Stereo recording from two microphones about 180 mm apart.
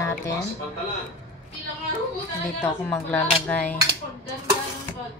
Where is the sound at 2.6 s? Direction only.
10° left (ahead or behind).